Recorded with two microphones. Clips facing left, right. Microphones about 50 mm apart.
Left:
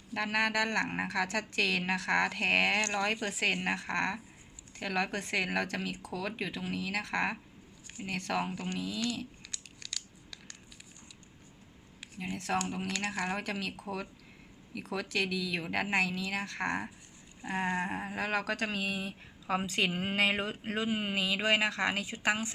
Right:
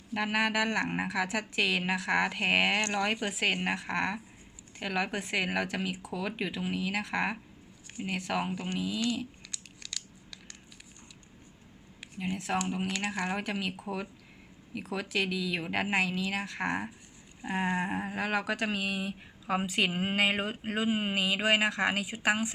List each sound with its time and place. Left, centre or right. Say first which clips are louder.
0.1 s speech: right 2 dB; centre
2.8 s speech: right 2 dB; right
12.2 s speech: right 2 dB; centre